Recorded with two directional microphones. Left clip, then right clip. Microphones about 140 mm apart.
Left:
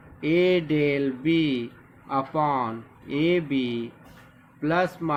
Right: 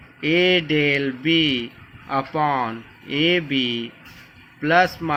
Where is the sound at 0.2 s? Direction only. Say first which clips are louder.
Right 4 dB; 25° right (ahead or behind).